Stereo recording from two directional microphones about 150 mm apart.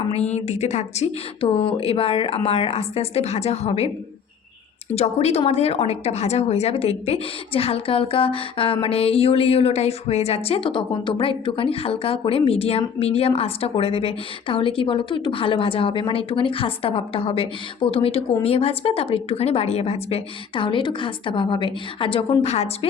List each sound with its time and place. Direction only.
0.1 s a woman's voice: 45° left (ahead or behind)
4.9 s a woman's voice: 45° left (ahead or behind)